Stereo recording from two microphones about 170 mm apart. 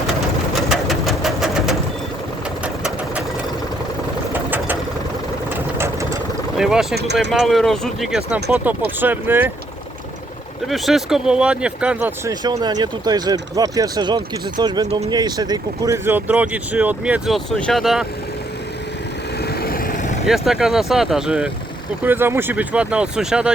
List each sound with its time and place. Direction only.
0.7 s sewing machine: centre (ahead or behind)
4.3 s vehicle: 10° right (ahead or behind)
5.5 s sewing machine: 15° right (ahead or behind)
6.6 s speech: 5° right (ahead or behind)
6.9 s speech: 80° right
7.3 s speech: centre (ahead or behind)
10.7 s speech: centre (ahead or behind)
12.3 s speech: 25° right (ahead or behind); by 18.0 s centre (ahead or behind)
19.4 s vehicle: 65° left (ahead or behind); by 20.1 s 50° left (ahead or behind)
20.2 s speech: centre (ahead or behind)